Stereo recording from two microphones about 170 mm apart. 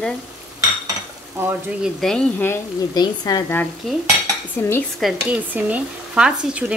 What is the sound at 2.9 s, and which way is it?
Speech, 25° left (ahead or behind).